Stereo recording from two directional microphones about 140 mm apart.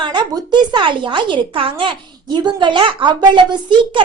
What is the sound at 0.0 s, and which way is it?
Speech, 35° right (ahead or behind).